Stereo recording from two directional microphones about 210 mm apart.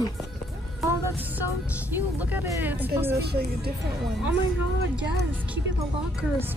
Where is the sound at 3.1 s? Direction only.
50° right (ahead or behind).